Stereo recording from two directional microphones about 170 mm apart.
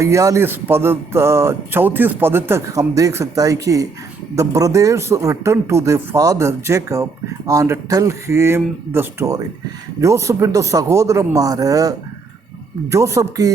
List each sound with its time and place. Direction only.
0.0 s a man's voice: 15° right (ahead or behind)